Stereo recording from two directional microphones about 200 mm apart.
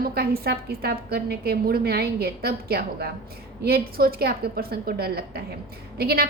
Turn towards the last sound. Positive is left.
turn(degrees=-50)  # may be behind; listen again after turning